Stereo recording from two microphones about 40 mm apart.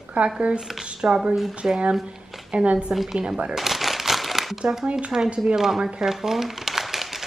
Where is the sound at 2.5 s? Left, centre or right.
Right.